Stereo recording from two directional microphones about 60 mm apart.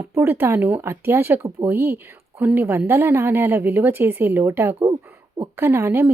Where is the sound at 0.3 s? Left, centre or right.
Right.